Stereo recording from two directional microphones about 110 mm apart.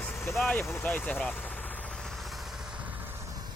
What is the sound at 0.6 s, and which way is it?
Speech, 20° left (ahead or behind).